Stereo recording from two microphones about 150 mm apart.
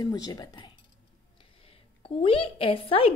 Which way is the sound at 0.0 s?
25° left (ahead or behind).